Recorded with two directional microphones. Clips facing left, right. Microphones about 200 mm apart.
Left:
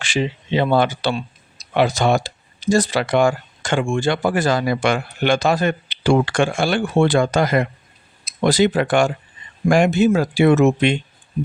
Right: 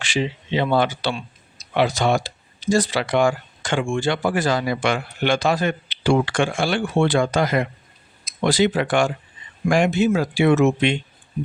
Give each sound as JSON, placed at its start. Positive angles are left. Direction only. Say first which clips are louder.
{"t": 0.0, "sound": "speech", "louder": "left 2 dB", "side_deg": 45}